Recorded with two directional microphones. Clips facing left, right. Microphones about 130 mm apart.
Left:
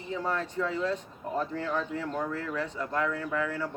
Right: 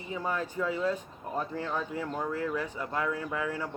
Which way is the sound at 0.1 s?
10° right (ahead or behind).